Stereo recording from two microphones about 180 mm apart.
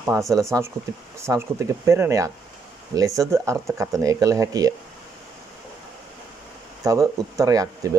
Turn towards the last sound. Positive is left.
turn(degrees=-20)  # may be behind; listen again after turning